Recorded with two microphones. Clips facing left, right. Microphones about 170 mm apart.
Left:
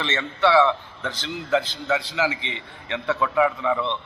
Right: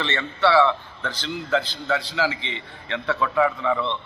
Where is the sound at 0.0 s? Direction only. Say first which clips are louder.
Even; 15° left (ahead or behind).